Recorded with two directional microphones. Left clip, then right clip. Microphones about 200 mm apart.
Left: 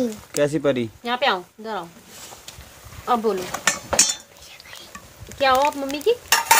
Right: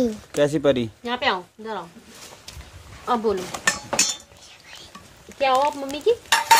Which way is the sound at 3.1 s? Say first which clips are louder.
Left 1 dB; 25° left (ahead or behind).